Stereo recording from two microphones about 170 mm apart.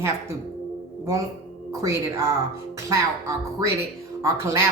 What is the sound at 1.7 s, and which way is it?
Speech, 15° right (ahead or behind).